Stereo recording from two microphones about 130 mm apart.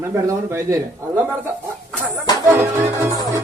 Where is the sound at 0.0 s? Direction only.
20° right (ahead or behind).